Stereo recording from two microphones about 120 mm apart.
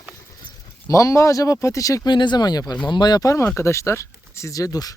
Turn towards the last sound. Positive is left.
turn(degrees=30)  # may be behind; listen again after turning